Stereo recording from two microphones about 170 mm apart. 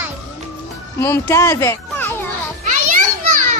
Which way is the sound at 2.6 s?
45° right (ahead or behind).